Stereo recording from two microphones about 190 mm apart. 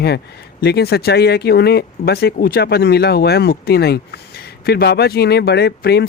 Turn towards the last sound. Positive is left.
turn(degrees=60)  # may be behind; listen again after turning